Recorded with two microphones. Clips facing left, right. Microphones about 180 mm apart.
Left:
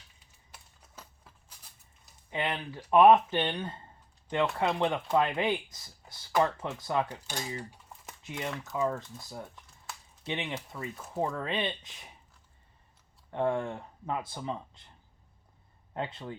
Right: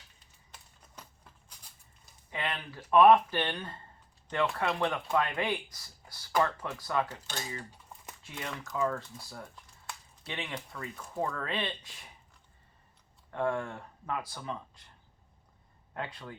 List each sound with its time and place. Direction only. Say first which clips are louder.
0.5 s a sound: left 1 dB; 5° left (ahead or behind)
2.3 s speech: left 4 dB; 20° left (ahead or behind)
10.2 s speech: left 4 dB; 20° left (ahead or behind)
10.9 s speech: left 2 dB; 5° left (ahead or behind)
11.2 s speech: left 2 dB; 20° left (ahead or behind)
13.3 s speech: left 2 dB; 25° left (ahead or behind)
16.0 s speech: left 3 dB; 25° left (ahead or behind)